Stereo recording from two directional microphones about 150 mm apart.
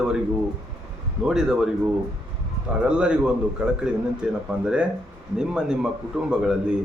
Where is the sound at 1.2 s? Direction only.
5° right (ahead or behind).